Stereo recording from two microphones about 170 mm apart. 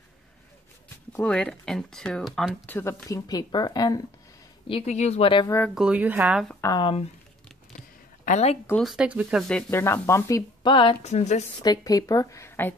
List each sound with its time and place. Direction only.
1.1 s speech: 5° left (ahead or behind)
2.6 s speech: 15° left (ahead or behind)
4.6 s speech: 35° left (ahead or behind)
5.8 s speech: 10° right (ahead or behind)
6.6 s speech: 25° left (ahead or behind)
8.3 s speech: 40° left (ahead or behind)
8.8 s speech: 5° right (ahead or behind); by 11.4 s 40° left (ahead or behind)
11.6 s speech: 25° left (ahead or behind)